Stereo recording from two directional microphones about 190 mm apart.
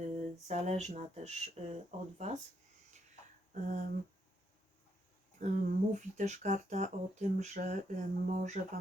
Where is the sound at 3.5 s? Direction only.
40° right (ahead or behind).